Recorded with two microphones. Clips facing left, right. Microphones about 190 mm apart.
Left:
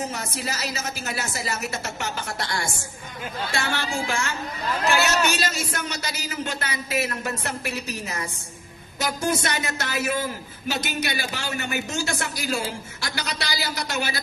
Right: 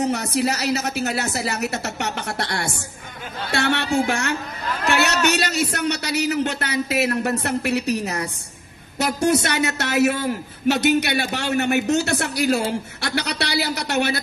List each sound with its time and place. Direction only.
0.0 s a man's voice: 65° right (ahead or behind)